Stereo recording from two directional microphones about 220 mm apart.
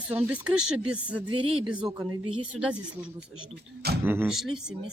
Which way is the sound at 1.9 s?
15° right (ahead or behind).